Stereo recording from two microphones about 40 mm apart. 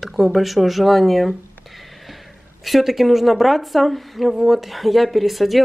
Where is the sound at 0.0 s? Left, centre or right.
Centre.